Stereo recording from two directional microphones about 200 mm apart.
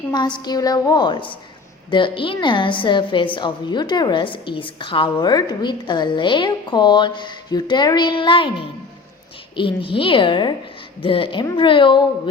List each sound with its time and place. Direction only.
0.3 s a woman's voice: 20° left (ahead or behind)